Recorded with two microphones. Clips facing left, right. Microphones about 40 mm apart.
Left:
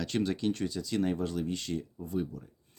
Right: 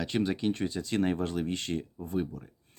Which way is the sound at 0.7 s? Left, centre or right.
Right.